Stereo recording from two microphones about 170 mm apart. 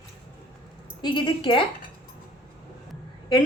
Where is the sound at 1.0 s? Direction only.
30° left (ahead or behind).